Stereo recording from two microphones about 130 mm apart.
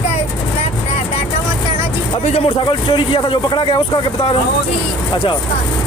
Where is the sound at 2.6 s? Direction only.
40° left (ahead or behind).